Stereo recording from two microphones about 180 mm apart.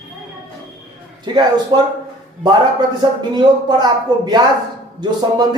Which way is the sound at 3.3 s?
25° right (ahead or behind).